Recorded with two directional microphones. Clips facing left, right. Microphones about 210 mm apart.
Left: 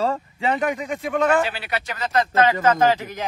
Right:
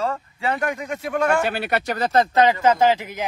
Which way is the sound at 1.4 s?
50° right (ahead or behind).